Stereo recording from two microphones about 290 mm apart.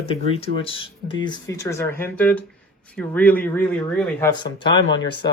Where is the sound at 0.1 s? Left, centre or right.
Centre.